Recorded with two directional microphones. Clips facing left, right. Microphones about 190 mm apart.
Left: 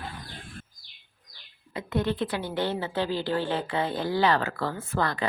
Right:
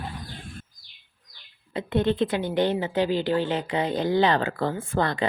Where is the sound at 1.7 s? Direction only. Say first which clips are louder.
Right 4 dB; 25° right (ahead or behind).